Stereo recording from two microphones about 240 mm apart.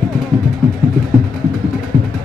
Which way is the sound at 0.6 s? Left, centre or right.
Centre.